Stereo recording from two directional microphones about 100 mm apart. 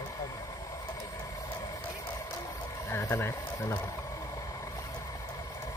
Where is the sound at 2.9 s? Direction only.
25° left (ahead or behind).